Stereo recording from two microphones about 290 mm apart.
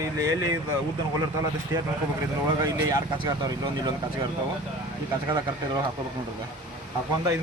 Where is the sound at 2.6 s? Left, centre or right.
Centre.